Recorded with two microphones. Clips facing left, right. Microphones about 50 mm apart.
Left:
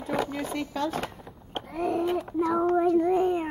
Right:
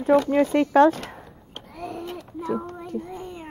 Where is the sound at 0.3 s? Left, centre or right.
Right.